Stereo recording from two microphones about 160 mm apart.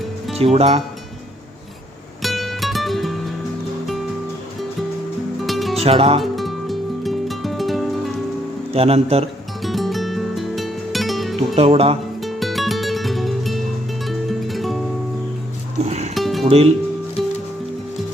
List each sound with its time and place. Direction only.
0.3 s speech: 40° right (ahead or behind)
2.2 s music: centre (ahead or behind)
5.4 s music: centre (ahead or behind)
5.7 s music: 40° right (ahead or behind)
6.1 s music: centre (ahead or behind)
8.7 s speech: 40° right (ahead or behind)
9.6 s music: centre (ahead or behind)
11.5 s speech: 40° right (ahead or behind)
12.2 s music: centre (ahead or behind)
15.9 s music: 45° right (ahead or behind)
16.1 s music: centre (ahead or behind)
16.5 s speech: 40° right (ahead or behind)